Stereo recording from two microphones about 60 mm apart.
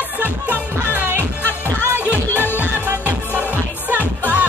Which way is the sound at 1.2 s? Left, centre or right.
Left.